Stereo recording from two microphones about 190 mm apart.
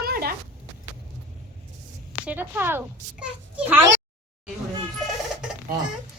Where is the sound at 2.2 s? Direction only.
10° right (ahead or behind).